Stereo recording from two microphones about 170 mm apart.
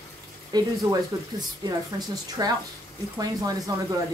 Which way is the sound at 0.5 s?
25° right (ahead or behind).